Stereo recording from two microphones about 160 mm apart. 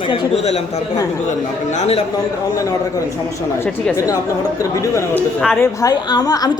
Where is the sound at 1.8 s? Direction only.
40° left (ahead or behind).